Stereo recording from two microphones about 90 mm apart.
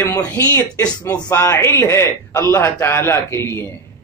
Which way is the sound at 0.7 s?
35° left (ahead or behind).